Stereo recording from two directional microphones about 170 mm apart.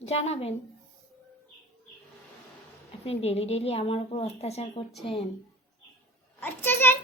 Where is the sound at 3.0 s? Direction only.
35° left (ahead or behind).